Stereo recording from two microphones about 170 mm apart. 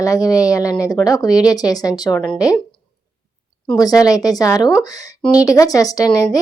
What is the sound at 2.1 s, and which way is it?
Speech, 5° left (ahead or behind).